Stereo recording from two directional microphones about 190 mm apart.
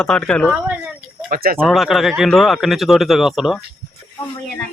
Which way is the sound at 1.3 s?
50° right (ahead or behind).